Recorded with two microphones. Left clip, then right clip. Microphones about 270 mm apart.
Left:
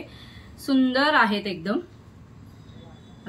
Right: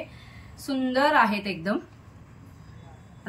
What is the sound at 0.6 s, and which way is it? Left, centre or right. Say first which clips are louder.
A woman's voice: left 2 dB; centre.